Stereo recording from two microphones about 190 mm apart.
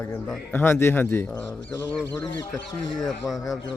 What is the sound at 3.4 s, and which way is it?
Speech, 20° left (ahead or behind).